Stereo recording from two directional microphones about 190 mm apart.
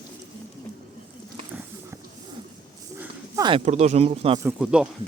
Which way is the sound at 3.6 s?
35° right (ahead or behind).